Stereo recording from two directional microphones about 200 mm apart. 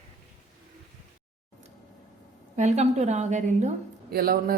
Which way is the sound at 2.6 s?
35° right (ahead or behind).